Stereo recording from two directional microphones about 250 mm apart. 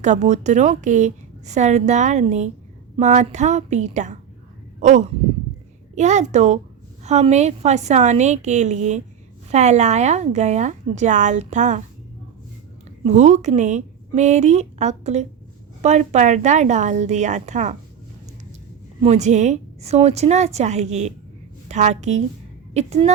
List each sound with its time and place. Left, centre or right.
0.0 s a woman's voice: right
13.1 s a woman's voice: right
19.0 s a woman's voice: right